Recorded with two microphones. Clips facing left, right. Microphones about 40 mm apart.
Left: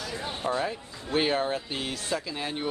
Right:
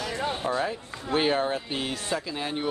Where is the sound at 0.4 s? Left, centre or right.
Centre.